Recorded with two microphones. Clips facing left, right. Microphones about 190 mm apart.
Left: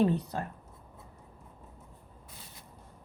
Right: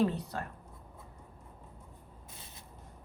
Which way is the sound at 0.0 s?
25° left (ahead or behind).